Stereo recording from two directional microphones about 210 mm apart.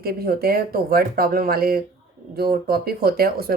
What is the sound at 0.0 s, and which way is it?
Speech, 45° right (ahead or behind).